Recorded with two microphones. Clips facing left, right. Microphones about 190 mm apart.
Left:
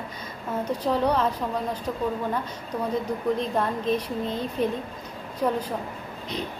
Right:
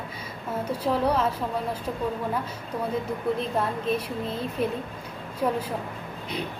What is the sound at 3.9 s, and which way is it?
A woman's voice, 5° right (ahead or behind).